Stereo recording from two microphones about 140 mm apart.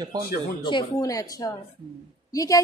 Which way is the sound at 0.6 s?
30° left (ahead or behind).